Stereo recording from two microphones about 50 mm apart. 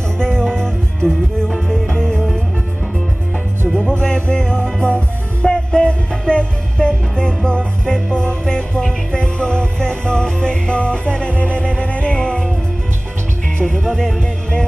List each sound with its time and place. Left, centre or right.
0.2 s music: centre
4.0 s music: left
5.4 s music: centre
13.7 s music: centre